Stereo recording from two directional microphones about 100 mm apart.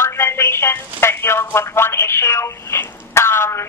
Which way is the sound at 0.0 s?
25° left (ahead or behind).